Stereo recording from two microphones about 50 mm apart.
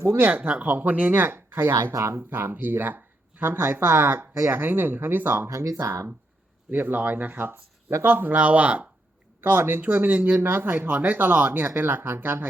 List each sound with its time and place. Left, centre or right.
0.2 s speech: right
0.4 s speech: right
1.2 s speech: right
1.7 s speech: right
2.1 s speech: right
5.8 s speech: right
6.7 s speech: right
8.0 s speech: right
9.4 s speech: right
9.8 s speech: right
10.4 s speech: right